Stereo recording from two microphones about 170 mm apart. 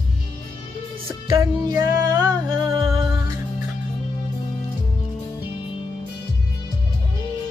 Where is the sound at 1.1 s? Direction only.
30° right (ahead or behind).